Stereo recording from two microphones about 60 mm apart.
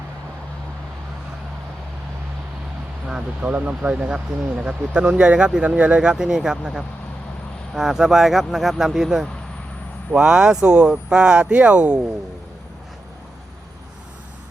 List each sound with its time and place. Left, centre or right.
3.4 s speech: right; by 9.2 s centre
10.1 s speech: centre